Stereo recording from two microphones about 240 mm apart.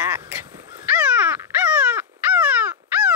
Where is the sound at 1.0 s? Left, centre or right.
Centre.